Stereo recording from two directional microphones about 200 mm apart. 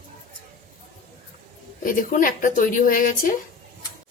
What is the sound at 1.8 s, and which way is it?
A woman's voice, 40° left (ahead or behind).